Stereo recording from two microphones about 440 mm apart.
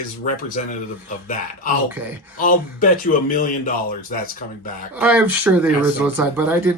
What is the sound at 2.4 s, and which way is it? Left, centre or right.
Speech, centre.